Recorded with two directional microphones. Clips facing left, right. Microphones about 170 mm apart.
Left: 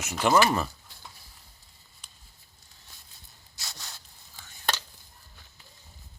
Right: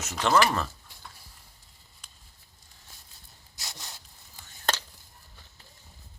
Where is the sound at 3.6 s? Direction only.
20° right (ahead or behind).